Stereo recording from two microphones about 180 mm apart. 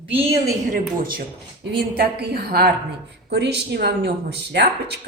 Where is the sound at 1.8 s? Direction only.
60° right (ahead or behind).